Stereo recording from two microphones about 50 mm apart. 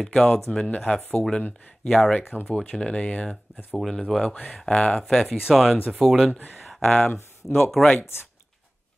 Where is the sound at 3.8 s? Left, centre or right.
Centre.